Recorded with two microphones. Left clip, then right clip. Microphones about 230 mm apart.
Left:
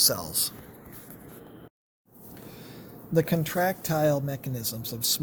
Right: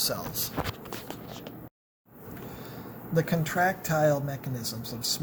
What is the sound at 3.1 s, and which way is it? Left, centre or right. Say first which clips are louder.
Speech: left 1 dB; left.